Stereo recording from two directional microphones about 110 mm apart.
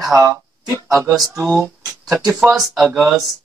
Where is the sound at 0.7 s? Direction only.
30° right (ahead or behind).